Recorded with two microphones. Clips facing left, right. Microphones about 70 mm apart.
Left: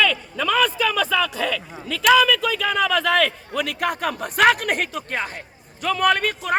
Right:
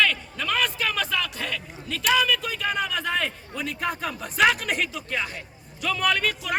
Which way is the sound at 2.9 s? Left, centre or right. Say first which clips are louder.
Left 8 dB; left.